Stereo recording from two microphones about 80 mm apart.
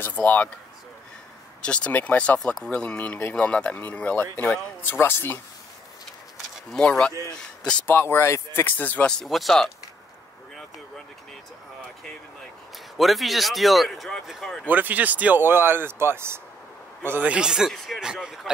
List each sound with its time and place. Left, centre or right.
0.0 s speech: left
1.6 s speech: centre
6.7 s speech: centre
7.8 s speech: left
9.1 s speech: centre
12.9 s speech: centre
14.7 s speech: right
17.3 s speech: centre